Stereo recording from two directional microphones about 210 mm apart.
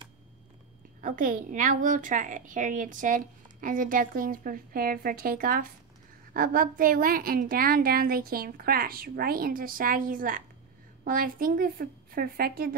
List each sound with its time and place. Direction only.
1.0 s a woman's voice: 40° right (ahead or behind)